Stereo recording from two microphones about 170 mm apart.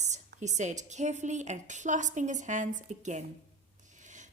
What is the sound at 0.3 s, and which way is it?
Speech, 45° right (ahead or behind).